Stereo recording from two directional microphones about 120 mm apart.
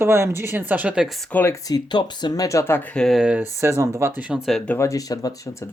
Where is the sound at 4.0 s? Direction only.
20° right (ahead or behind).